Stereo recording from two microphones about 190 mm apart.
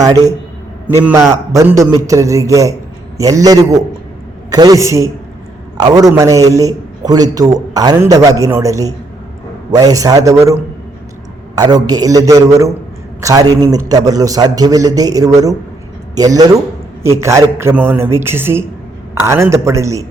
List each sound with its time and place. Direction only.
0.0 s a man's voice: 20° right (ahead or behind)